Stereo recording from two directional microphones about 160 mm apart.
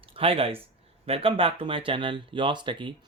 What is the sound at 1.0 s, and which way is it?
Speech, 35° right (ahead or behind).